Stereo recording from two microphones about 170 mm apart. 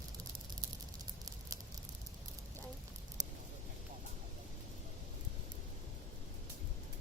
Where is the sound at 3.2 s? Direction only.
20° right (ahead or behind).